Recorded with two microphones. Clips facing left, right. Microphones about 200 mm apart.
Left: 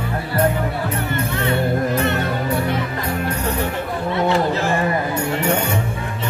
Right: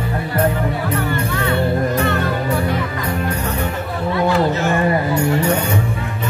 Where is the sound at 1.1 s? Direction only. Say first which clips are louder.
Right 1 dB; 20° left (ahead or behind).